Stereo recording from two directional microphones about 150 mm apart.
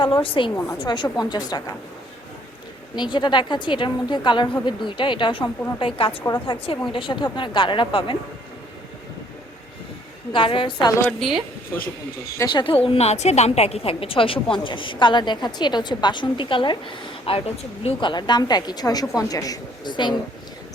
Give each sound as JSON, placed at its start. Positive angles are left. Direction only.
{"t": 0.0, "sound": "a woman's voice", "side_deg": 35}
{"t": 0.5, "sound": "a woman's voice", "side_deg": 20}
{"t": 0.8, "sound": "a woman's voice", "side_deg": 30}
{"t": 2.9, "sound": "a woman's voice", "side_deg": 30}
{"t": 10.3, "sound": "a woman's voice", "side_deg": 35}
{"t": 11.2, "sound": "speech", "side_deg": 0}
{"t": 12.4, "sound": "a woman's voice", "side_deg": 30}